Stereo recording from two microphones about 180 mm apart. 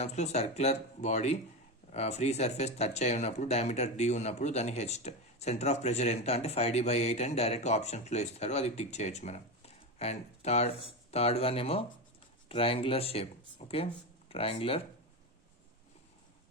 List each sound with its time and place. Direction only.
0.0 s speech: 40° left (ahead or behind)